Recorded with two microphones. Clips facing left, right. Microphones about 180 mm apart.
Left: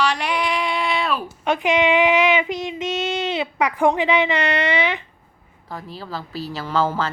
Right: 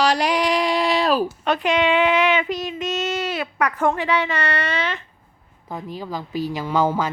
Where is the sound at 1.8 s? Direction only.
15° left (ahead or behind).